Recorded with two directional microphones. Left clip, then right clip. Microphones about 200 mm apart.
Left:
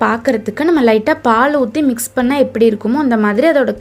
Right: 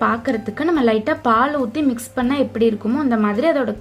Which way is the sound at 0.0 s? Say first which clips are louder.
Left 5 dB; 25° left (ahead or behind).